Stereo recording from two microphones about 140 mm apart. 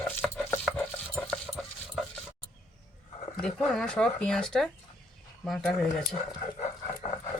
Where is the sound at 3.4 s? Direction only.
5° left (ahead or behind).